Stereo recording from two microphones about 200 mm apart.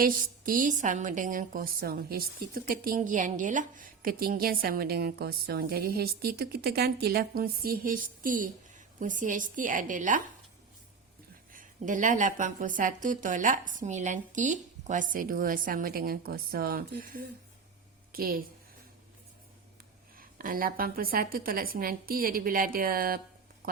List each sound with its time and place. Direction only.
0.0 s a woman's voice: 45° right (ahead or behind)
11.5 s a woman's voice: 40° right (ahead or behind)
20.1 s a woman's voice: 45° right (ahead or behind)